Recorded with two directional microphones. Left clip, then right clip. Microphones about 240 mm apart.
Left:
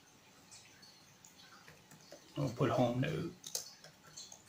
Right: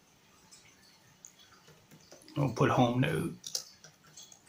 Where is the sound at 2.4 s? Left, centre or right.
Right.